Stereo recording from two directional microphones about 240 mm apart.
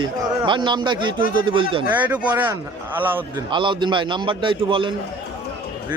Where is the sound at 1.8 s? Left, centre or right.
Centre.